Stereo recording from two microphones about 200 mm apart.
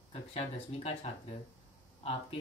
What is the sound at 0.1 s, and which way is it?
Speech, 30° left (ahead or behind).